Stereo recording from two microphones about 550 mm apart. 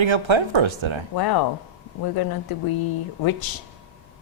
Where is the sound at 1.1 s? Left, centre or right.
Left.